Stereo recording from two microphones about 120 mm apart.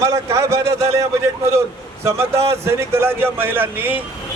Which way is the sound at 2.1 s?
25° right (ahead or behind).